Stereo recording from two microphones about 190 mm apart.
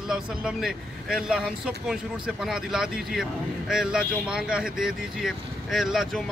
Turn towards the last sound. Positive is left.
turn(degrees=0)  # may be behind; listen again after turning